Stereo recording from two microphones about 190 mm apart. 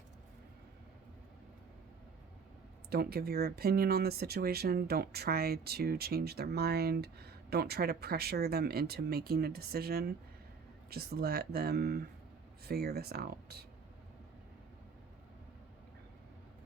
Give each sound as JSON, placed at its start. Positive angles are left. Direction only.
{"t": 2.9, "sound": "speech", "side_deg": -55}